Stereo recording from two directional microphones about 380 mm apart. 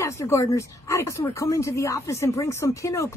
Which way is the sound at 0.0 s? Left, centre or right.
Centre.